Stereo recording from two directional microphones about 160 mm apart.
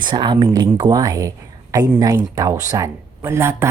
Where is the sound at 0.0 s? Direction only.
30° right (ahead or behind).